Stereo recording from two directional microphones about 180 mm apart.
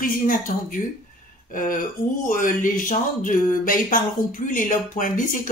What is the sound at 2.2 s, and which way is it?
Speech, 45° left (ahead or behind).